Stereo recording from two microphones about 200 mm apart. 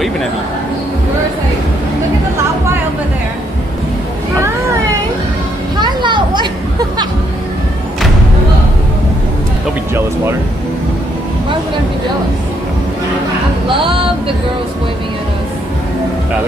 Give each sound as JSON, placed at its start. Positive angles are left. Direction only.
{"t": 5.8, "sound": "vehicle", "side_deg": -20}
{"t": 13.7, "sound": "speech", "side_deg": -25}